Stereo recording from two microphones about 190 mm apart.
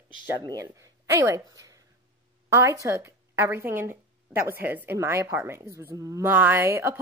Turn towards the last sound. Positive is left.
turn(degrees=-10)  # may be behind; listen again after turning